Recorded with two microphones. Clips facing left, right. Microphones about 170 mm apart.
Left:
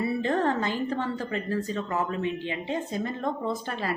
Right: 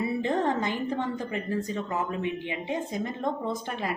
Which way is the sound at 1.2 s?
15° right (ahead or behind).